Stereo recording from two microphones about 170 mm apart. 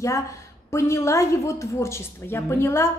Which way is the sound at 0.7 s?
15° left (ahead or behind).